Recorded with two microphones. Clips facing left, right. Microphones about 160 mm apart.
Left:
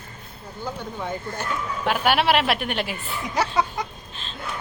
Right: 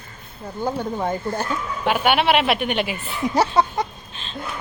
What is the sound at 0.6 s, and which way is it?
Speech, 45° right (ahead or behind).